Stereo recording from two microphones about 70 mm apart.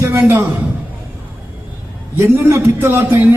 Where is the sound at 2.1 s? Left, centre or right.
Right.